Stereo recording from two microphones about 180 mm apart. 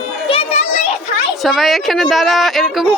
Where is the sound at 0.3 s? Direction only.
35° left (ahead or behind).